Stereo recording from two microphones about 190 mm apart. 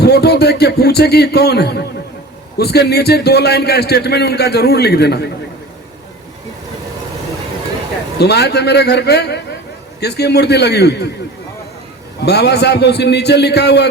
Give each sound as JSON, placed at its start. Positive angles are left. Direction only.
{"t": 0.0, "sound": "a man's voice", "side_deg": 60}
{"t": 8.2, "sound": "a man's voice", "side_deg": 60}
{"t": 12.2, "sound": "a man's voice", "side_deg": 60}